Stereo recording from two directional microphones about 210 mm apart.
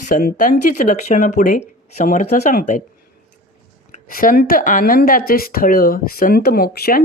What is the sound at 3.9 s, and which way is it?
Speech, 40° left (ahead or behind).